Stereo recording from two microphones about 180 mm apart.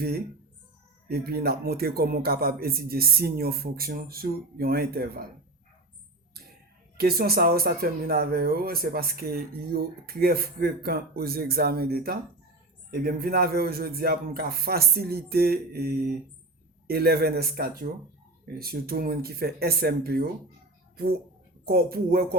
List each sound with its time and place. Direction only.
1.0 s speech: 60° right (ahead or behind)
6.9 s speech: 60° right (ahead or behind)